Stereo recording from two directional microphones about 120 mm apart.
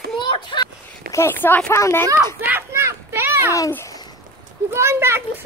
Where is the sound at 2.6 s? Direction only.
20° right (ahead or behind).